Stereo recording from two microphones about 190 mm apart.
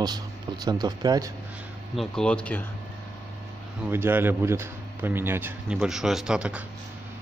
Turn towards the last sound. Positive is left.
turn(degrees=-5)  # may be behind; listen again after turning